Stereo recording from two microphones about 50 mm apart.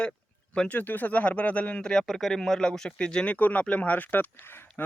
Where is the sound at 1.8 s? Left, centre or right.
Centre.